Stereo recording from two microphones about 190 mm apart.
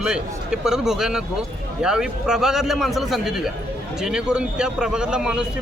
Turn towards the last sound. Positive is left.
turn(degrees=-5)  # may be behind; listen again after turning